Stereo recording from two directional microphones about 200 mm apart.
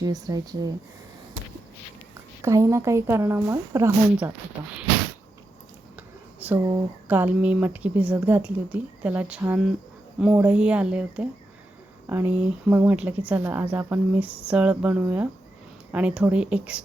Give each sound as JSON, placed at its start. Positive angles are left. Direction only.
{"t": 0.0, "sound": "speech", "side_deg": -20}
{"t": 2.4, "sound": "speech", "side_deg": -15}
{"t": 6.0, "sound": "speech", "side_deg": -10}